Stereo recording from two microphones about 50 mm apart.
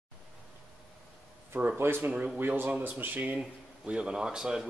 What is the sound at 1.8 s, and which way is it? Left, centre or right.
Speech, right.